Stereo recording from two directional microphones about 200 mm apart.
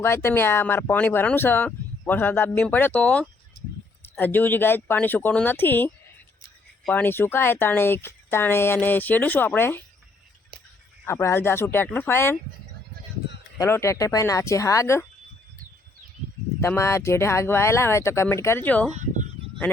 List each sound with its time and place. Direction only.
0.0 s speech: 10° left (ahead or behind)
11.0 s speech: 15° left (ahead or behind)
13.6 s speech: 15° left (ahead or behind)
16.6 s speech: 15° left (ahead or behind)
18.9 s a sound: 35° right (ahead or behind)